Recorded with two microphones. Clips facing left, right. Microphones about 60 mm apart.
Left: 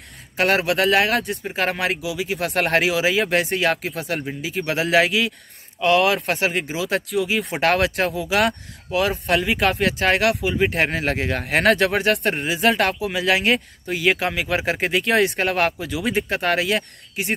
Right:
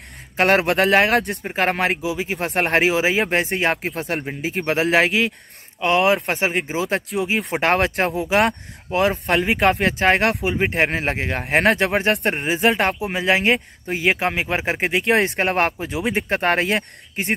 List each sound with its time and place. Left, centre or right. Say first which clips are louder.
0.4 s speech: right 2 dB; right
10.6 s speech: right 1 dB; right
12.3 s speech: right 1 dB; right; by 15.1 s centre
15.1 s speech: even; right